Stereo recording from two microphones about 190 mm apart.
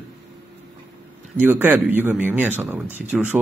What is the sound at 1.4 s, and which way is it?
Speech, 10° right (ahead or behind).